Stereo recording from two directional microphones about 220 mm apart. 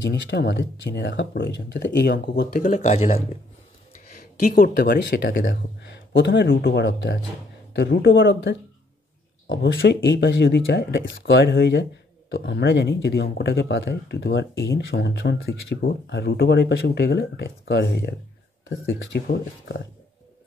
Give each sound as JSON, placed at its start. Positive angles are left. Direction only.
{"t": 0.0, "sound": "speech", "side_deg": 50}
{"t": 2.2, "sound": "speech", "side_deg": 45}
{"t": 4.2, "sound": "speech", "side_deg": 40}
{"t": 18.7, "sound": "speech", "side_deg": 60}